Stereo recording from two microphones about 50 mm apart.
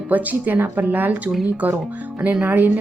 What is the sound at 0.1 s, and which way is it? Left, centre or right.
A woman's voice, right.